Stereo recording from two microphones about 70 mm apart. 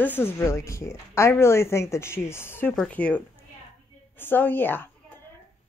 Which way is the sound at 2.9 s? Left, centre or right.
Centre.